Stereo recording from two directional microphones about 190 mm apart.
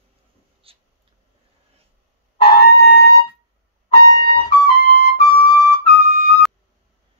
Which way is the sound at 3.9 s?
55° right (ahead or behind).